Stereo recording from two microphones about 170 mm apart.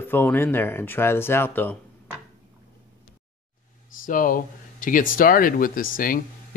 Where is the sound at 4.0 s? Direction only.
55° left (ahead or behind).